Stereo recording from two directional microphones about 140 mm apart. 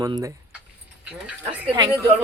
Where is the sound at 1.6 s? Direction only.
30° right (ahead or behind).